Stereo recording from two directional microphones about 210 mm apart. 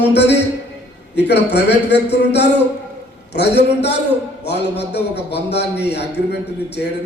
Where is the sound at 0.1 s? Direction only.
55° left (ahead or behind).